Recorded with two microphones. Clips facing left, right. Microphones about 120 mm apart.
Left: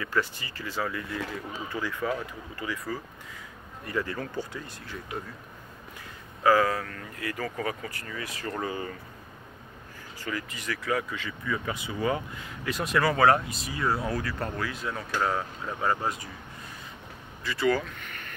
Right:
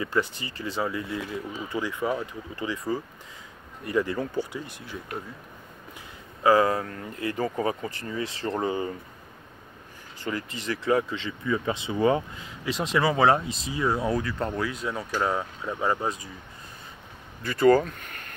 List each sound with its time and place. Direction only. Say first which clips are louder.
0.0 s speech: right 3 dB; 20° right (ahead or behind)
6.4 s speech: right 2 dB; 25° right (ahead or behind)
10.2 s speech: right 3 dB; 30° right (ahead or behind)
17.4 s speech: right 7 dB; 50° right (ahead or behind)